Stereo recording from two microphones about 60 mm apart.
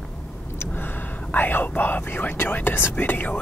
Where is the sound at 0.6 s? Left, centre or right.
Left.